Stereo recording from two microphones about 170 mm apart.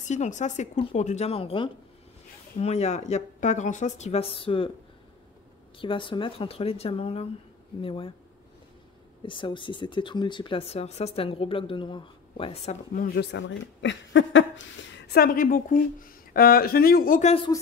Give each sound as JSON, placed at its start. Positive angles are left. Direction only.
{"t": 0.0, "sound": "speech", "side_deg": 45}
{"t": 5.8, "sound": "speech", "side_deg": 30}
{"t": 9.2, "sound": "speech", "side_deg": 30}
{"t": 12.9, "sound": "speech", "side_deg": 60}